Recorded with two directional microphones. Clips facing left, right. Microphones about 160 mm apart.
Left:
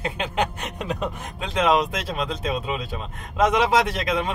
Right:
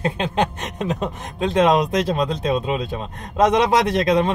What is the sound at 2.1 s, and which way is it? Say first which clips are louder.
Speech: right 6 dB; 30° right (ahead or behind).